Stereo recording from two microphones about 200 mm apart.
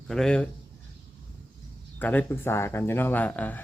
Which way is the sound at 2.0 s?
10° left (ahead or behind).